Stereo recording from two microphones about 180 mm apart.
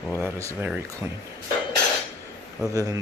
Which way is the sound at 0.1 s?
15° right (ahead or behind).